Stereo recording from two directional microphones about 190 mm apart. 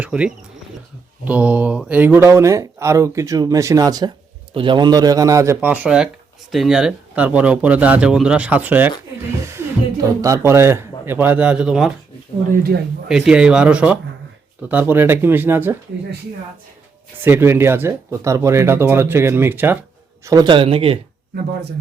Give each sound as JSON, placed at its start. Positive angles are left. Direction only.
{"t": 0.0, "sound": "a man's voice", "side_deg": -5}
{"t": 10.2, "sound": "speech", "side_deg": -15}
{"t": 13.1, "sound": "speech", "side_deg": -5}
{"t": 17.2, "sound": "speech", "side_deg": -10}
{"t": 20.2, "sound": "a man's voice", "side_deg": -20}